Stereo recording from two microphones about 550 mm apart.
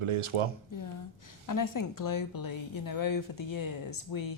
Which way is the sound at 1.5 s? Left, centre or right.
Left.